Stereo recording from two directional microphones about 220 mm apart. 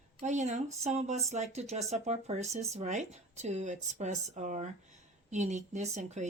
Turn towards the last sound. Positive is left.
turn(degrees=-30)  # may be behind; listen again after turning